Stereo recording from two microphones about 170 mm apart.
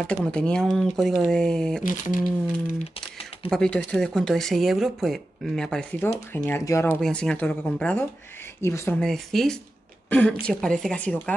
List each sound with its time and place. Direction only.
0.0 s speech: 5° left (ahead or behind)
1.8 s speech: 50° left (ahead or behind)
3.4 s speech: 5° left (ahead or behind)
8.9 s speech: 5° left (ahead or behind)